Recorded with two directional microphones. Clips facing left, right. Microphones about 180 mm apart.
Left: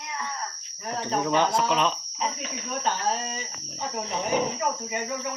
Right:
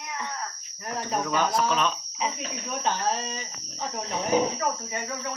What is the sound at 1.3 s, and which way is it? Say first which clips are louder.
Speech: left 1 dB; 25° left (ahead or behind).